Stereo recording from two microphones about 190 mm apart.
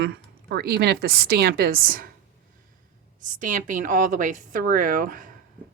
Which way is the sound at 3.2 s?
40° right (ahead or behind).